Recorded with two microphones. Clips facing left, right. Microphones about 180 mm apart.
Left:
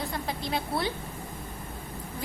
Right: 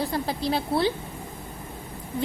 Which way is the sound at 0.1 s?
35° right (ahead or behind).